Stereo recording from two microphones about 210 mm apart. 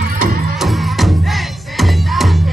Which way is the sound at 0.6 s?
Centre (ahead or behind).